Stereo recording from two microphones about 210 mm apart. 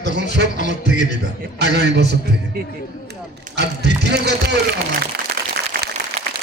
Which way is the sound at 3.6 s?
55° right (ahead or behind).